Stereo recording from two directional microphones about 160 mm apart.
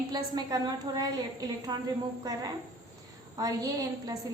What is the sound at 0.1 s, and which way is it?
A woman's voice, 25° right (ahead or behind).